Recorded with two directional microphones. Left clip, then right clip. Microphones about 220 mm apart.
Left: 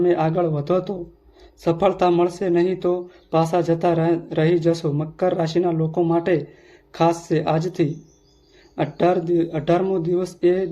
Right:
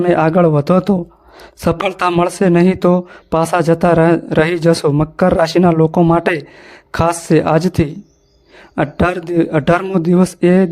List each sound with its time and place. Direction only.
0.0 s speech: 45° right (ahead or behind)